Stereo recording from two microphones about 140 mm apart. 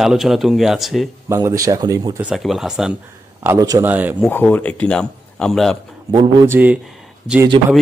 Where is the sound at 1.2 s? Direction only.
20° right (ahead or behind).